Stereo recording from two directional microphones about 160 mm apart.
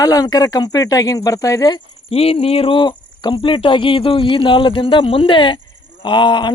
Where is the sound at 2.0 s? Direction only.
40° left (ahead or behind).